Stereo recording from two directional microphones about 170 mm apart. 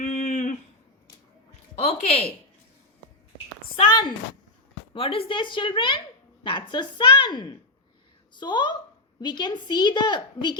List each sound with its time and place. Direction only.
0.0 s a sound: 45° left (ahead or behind)
1.8 s speech: 35° left (ahead or behind)
3.8 s a woman's voice: 25° left (ahead or behind)